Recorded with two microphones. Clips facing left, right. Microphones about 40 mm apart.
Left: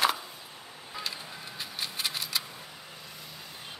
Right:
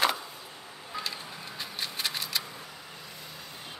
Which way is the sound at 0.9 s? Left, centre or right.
Centre.